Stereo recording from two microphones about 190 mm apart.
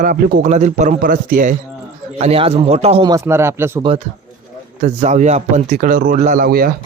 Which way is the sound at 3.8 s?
30° right (ahead or behind).